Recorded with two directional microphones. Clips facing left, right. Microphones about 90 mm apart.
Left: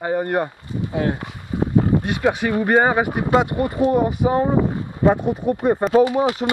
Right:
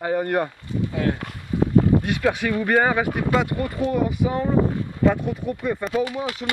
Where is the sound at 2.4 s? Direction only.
25° left (ahead or behind).